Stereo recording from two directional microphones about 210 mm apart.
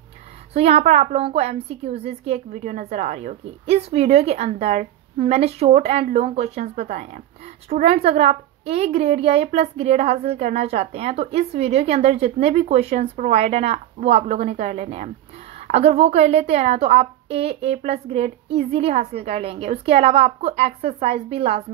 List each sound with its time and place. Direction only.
0.5 s a woman's voice: 30° right (ahead or behind)